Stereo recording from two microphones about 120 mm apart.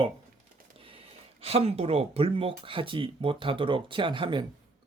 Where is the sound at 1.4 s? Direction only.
55° right (ahead or behind).